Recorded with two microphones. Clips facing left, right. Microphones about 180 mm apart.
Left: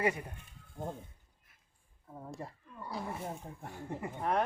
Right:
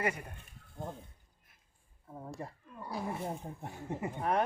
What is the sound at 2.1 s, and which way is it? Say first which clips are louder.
Speech: right 1 dB; 10° right (ahead or behind).